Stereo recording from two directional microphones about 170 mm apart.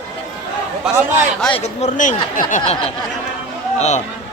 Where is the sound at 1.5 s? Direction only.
40° left (ahead or behind).